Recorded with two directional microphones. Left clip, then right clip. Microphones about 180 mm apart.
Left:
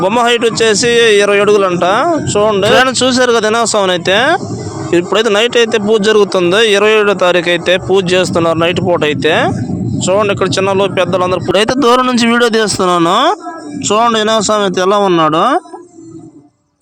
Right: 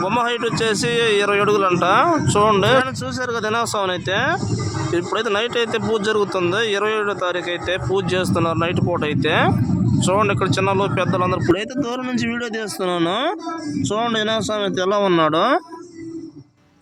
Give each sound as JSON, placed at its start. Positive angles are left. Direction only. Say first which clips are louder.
{"t": 0.0, "sound": "speech", "louder": "left 9 dB", "side_deg": 35}
{"t": 2.7, "sound": "speech", "louder": "left 10 dB", "side_deg": 40}
{"t": 11.5, "sound": "speech", "louder": "left 15 dB", "side_deg": 45}